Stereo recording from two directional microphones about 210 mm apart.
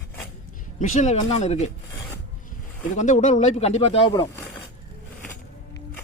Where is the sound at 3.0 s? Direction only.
35° left (ahead or behind).